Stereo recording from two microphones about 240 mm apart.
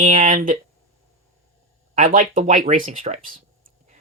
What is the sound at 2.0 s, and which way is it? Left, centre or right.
Speech, right.